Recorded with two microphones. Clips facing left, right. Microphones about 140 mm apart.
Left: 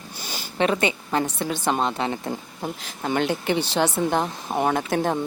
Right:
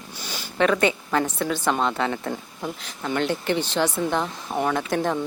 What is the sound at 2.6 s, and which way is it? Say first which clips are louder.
Speech: left 2 dB; 35° left (ahead or behind).